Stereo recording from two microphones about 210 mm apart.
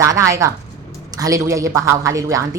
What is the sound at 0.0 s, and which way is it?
A woman's voice, 15° right (ahead or behind).